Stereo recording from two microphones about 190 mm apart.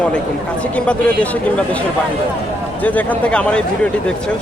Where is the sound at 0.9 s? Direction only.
5° left (ahead or behind).